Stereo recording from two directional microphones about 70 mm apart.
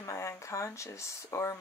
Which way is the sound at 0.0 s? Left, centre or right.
Left.